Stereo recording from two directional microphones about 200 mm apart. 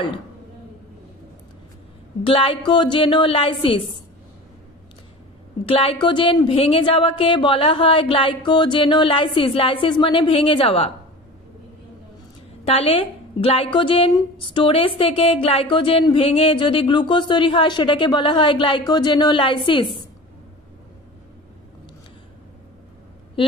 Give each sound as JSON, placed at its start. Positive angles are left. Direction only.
{"t": 2.2, "sound": "a woman's voice", "side_deg": 25}
{"t": 5.7, "sound": "a woman's voice", "side_deg": 25}
{"t": 12.6, "sound": "a woman's voice", "side_deg": 30}